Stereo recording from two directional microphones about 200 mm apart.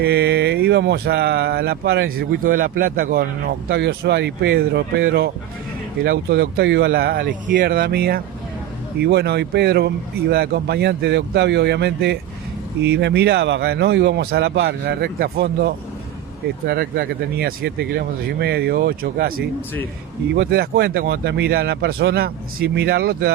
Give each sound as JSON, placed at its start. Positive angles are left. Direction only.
{"t": 0.0, "sound": "speech", "side_deg": -55}